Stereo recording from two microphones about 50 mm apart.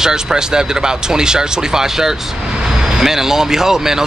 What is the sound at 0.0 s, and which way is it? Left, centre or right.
Speech, centre.